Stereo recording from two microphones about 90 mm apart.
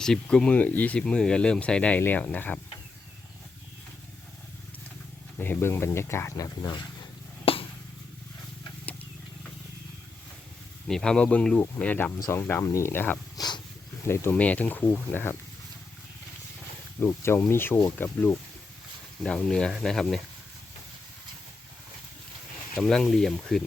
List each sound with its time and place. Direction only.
0.0 s speech: 5° left (ahead or behind)
5.4 s speech: 25° left (ahead or behind)
7.4 s a sound: 90° left
10.8 s speech: 5° left (ahead or behind); by 13.1 s 25° left (ahead or behind)
13.3 s dog: 50° left (ahead or behind)
14.1 s speech: 30° left (ahead or behind)
14.3 s speech: 15° left (ahead or behind)
17.0 s speech: 30° left (ahead or behind); by 20.2 s 5° left (ahead or behind)
22.8 s speech: 5° left (ahead or behind)